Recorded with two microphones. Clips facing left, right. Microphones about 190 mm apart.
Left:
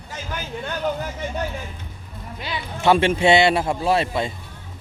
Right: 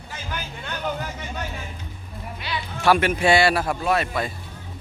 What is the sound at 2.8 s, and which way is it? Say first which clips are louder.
Speech: left 2 dB; 25° left (ahead or behind).